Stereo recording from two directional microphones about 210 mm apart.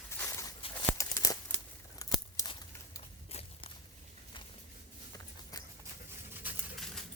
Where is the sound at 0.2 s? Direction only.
15° left (ahead or behind).